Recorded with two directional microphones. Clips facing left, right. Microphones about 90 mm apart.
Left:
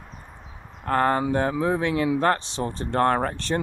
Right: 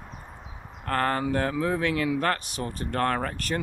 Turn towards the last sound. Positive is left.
turn(degrees=25)  # may be behind; listen again after turning